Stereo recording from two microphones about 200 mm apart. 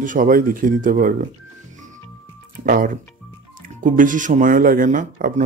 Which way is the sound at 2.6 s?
45° right (ahead or behind).